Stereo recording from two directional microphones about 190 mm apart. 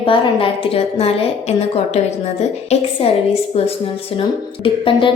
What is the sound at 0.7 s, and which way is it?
A woman's voice, 30° left (ahead or behind).